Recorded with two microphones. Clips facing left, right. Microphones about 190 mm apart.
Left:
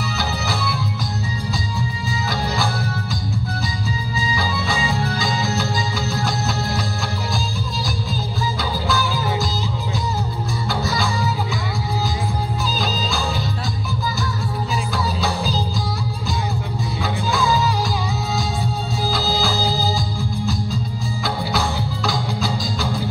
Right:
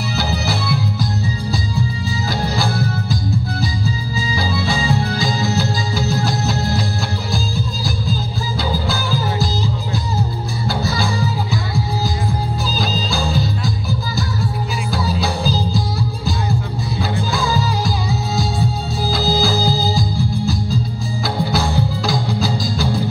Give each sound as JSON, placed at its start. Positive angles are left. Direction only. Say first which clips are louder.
{"t": 2.5, "sound": "music", "louder": "right 3 dB", "side_deg": -35}
{"t": 4.4, "sound": "music", "louder": "right 5 dB", "side_deg": -35}
{"t": 8.8, "sound": "music", "louder": "right 1 dB", "side_deg": -35}
{"t": 10.7, "sound": "music", "louder": "right 2 dB", "side_deg": -35}
{"t": 21.5, "sound": "music", "louder": "right 4 dB", "side_deg": -35}